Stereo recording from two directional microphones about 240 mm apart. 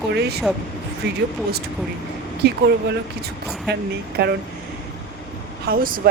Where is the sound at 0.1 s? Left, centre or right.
Right.